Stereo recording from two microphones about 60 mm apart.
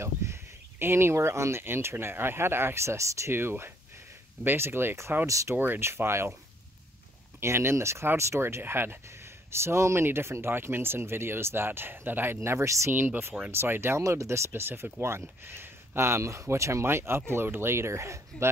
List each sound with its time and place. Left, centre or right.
0.0 s speech: right
3.3 s speech: right
5.2 s speech: right
5.6 s speech: right
5.9 s speech: right
7.3 s speech: right
12.4 s speech: right
12.9 s speech: right
14.0 s speech: right
14.5 s speech: right